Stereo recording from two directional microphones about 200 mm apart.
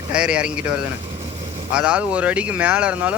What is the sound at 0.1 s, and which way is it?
Speech, 5° right (ahead or behind).